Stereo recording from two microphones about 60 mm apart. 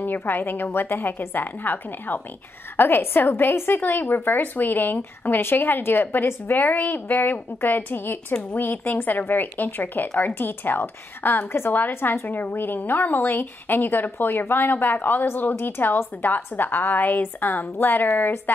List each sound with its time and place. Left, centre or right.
0.0 s speech: left